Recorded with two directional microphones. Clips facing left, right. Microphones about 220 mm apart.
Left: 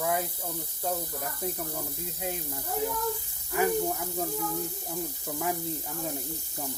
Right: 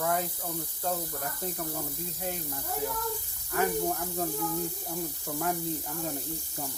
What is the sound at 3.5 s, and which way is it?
Speech, 10° left (ahead or behind).